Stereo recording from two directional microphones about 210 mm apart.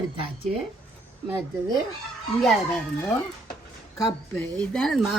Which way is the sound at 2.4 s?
5° left (ahead or behind).